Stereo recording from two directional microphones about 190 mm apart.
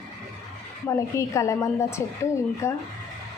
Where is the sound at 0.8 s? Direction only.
15° left (ahead or behind).